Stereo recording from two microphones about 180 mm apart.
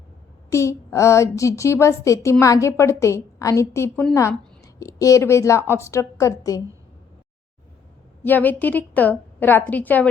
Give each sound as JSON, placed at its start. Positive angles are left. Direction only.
{"t": 0.5, "sound": "a woman's voice", "side_deg": 15}
{"t": 8.2, "sound": "a woman's voice", "side_deg": 10}